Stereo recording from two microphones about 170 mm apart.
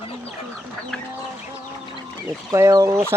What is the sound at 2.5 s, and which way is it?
Speech, 20° right (ahead or behind).